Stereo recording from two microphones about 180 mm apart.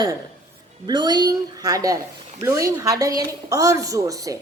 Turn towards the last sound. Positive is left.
turn(degrees=-20)  # may be behind; listen again after turning